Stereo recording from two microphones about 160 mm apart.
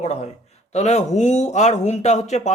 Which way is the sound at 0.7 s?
45° left (ahead or behind).